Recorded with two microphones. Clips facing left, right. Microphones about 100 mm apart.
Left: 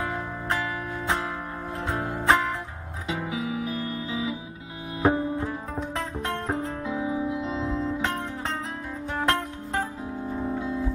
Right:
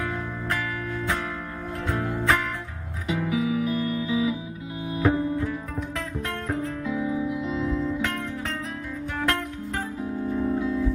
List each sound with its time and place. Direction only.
0.0 s music: 25° left (ahead or behind)